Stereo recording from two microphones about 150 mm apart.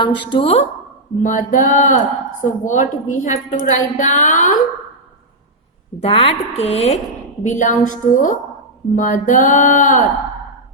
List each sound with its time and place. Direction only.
0.0 s a woman's voice: 35° left (ahead or behind)
1.2 s speech: 60° left (ahead or behind)
6.0 s a woman's voice: 40° left (ahead or behind)
7.4 s speech: 60° left (ahead or behind)